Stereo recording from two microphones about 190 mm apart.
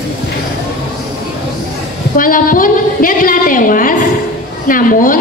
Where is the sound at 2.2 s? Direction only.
45° left (ahead or behind).